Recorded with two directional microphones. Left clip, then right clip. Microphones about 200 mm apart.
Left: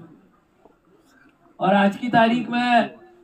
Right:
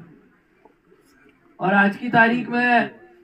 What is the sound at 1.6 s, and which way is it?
Speech, 15° left (ahead or behind).